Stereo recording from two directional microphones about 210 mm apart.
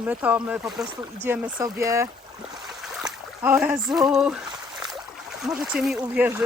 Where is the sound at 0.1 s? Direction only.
5° right (ahead or behind).